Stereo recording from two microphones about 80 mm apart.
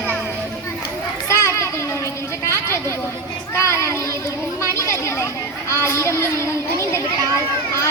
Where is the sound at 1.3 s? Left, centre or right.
Left.